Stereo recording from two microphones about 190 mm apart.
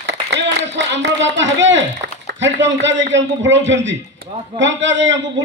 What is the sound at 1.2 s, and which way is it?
A man's voice, 75° right (ahead or behind).